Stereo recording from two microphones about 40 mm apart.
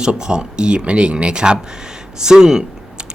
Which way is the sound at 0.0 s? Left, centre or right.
Right.